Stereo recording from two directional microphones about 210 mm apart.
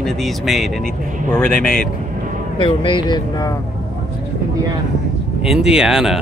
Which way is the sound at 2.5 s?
25° left (ahead or behind).